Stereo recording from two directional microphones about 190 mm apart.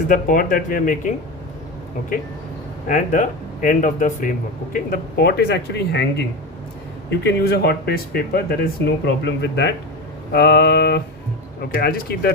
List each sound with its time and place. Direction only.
0.1 s speech: 45° left (ahead or behind)
2.8 s speech: 40° left (ahead or behind); by 6.2 s 60° left (ahead or behind)
7.3 s speech: 60° left (ahead or behind)